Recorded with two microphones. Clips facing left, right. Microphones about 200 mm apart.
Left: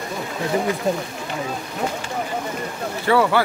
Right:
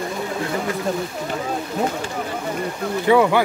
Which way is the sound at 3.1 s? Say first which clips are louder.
Right 2 dB; 15° right (ahead or behind).